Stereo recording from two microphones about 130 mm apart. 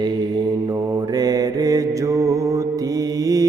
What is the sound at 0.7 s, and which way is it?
Mantra, 30° right (ahead or behind).